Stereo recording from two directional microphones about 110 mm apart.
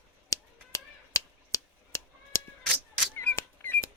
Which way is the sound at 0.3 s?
30° left (ahead or behind).